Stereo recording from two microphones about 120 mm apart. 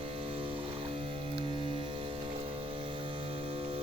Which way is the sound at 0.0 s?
50° right (ahead or behind).